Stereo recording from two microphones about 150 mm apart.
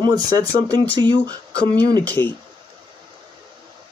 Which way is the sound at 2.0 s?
10° left (ahead or behind).